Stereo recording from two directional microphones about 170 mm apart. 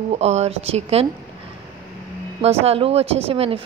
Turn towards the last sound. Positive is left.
turn(degrees=-35)  # may be behind; listen again after turning